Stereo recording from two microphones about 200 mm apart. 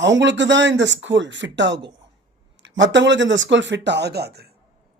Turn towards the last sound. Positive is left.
turn(degrees=-55)  # may be behind; listen again after turning